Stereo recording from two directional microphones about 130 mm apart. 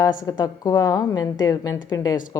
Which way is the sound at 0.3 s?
25° left (ahead or behind).